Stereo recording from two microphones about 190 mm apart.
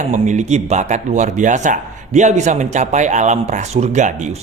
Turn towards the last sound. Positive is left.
turn(degrees=-40)  # may be behind; listen again after turning